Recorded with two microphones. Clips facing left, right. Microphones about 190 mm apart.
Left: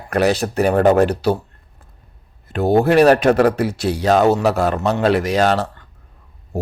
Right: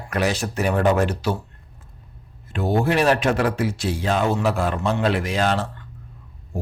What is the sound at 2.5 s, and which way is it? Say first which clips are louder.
Speech: left 6 dB; 35° left (ahead or behind).